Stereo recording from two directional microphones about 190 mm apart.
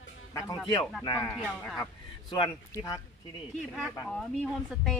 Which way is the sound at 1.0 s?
20° left (ahead or behind).